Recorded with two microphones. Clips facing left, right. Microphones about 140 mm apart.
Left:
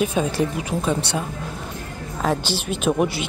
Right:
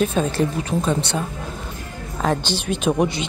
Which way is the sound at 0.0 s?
10° left (ahead or behind).